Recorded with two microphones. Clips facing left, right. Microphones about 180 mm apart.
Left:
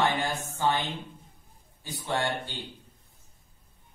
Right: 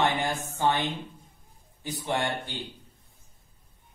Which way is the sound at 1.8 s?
20° right (ahead or behind).